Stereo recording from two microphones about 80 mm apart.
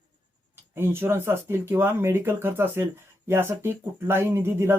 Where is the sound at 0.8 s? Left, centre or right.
Right.